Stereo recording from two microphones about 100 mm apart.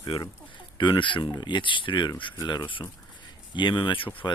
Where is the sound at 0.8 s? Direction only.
50° left (ahead or behind).